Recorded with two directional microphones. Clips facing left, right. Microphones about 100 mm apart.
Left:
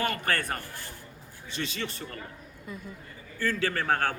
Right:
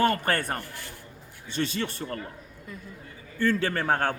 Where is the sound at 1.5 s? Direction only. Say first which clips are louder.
Right 5 dB; 40° right (ahead or behind).